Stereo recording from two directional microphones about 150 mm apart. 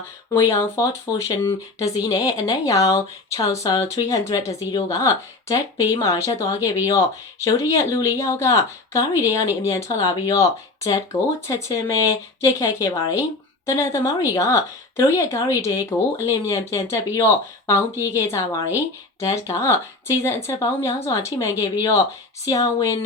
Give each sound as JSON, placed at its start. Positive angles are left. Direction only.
{"t": 0.3, "sound": "speech", "side_deg": 20}